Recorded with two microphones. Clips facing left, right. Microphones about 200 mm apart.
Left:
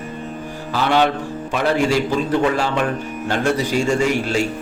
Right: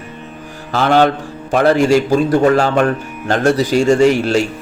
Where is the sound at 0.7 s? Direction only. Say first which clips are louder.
Right 5 dB; 50° right (ahead or behind).